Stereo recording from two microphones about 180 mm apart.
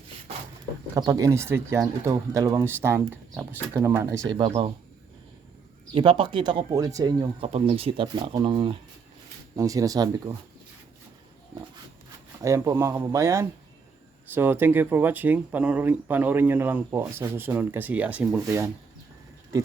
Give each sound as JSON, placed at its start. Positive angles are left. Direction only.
{"t": 0.9, "sound": "speech", "side_deg": -20}
{"t": 4.3, "sound": "speech", "side_deg": -30}
{"t": 5.9, "sound": "speech", "side_deg": -30}
{"t": 7.4, "sound": "speech", "side_deg": -35}
{"t": 9.6, "sound": "speech", "side_deg": -20}
{"t": 12.4, "sound": "speech", "side_deg": -15}